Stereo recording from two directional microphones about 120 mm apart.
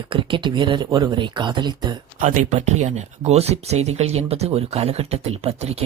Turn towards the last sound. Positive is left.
turn(degrees=-60)  # may be behind; listen again after turning